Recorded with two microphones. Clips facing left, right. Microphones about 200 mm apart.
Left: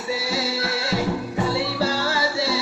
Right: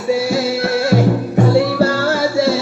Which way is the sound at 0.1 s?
50° right (ahead or behind).